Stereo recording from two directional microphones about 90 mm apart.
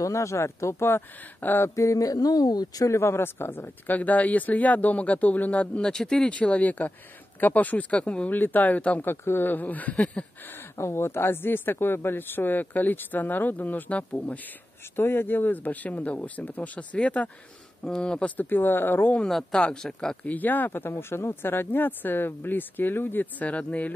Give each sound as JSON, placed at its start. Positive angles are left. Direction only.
{"t": 0.0, "sound": "speech", "side_deg": 35}
{"t": 1.8, "sound": "speech", "side_deg": 40}
{"t": 19.1, "sound": "speech", "side_deg": 5}
{"t": 20.2, "sound": "speech", "side_deg": 20}